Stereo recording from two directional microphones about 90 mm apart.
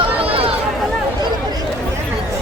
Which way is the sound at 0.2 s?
90° right.